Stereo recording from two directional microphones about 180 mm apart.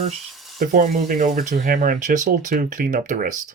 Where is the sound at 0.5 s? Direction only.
50° right (ahead or behind).